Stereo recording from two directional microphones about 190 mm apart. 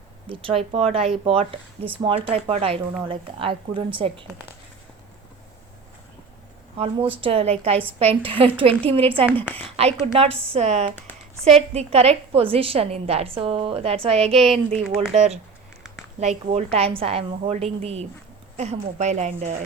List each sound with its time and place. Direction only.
0.3 s a woman's voice: 30° right (ahead or behind)
6.7 s a woman's voice: 30° right (ahead or behind)
14.3 s speech: centre (ahead or behind)
15.1 s a woman's voice: 35° right (ahead or behind)